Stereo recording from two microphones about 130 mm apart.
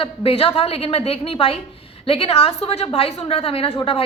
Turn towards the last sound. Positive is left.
turn(degrees=40)  # may be behind; listen again after turning